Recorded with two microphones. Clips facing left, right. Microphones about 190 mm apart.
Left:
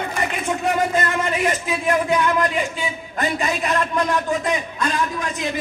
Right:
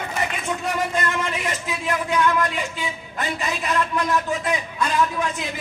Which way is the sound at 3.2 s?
50° left (ahead or behind).